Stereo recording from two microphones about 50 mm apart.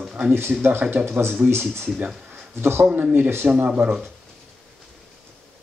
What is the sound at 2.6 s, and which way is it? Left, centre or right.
Speech, right.